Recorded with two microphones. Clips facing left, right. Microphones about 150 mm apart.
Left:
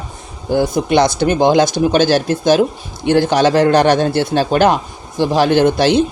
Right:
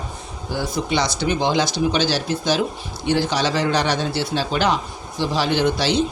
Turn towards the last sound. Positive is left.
turn(degrees=55)  # may be behind; listen again after turning